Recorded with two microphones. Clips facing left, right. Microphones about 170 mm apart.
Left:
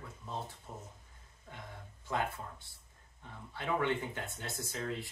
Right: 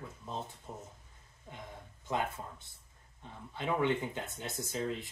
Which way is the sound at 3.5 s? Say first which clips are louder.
Right 2 dB; 15° right (ahead or behind).